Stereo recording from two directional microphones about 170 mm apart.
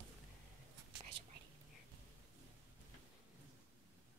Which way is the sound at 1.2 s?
90° right.